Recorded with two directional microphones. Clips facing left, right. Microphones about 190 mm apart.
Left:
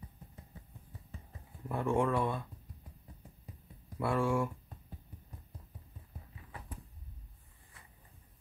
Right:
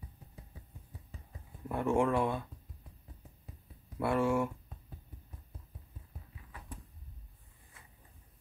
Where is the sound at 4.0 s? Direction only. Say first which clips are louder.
Right 2 dB; 5° right (ahead or behind).